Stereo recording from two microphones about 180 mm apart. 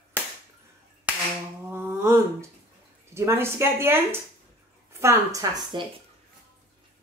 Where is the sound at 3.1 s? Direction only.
15° right (ahead or behind).